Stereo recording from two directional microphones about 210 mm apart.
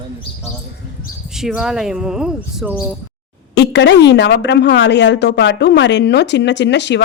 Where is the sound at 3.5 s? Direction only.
55° left (ahead or behind).